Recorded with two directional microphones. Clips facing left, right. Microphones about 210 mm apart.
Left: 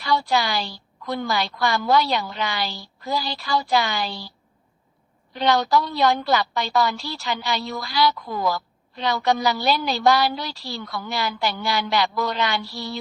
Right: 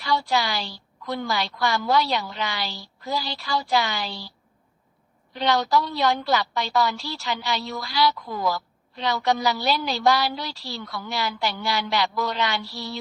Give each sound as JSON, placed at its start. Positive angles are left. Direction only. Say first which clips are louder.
{"t": 0.0, "sound": "a woman's voice", "louder": "left 2 dB", "side_deg": 55}
{"t": 5.3, "sound": "a woman's voice", "louder": "left 2 dB", "side_deg": 50}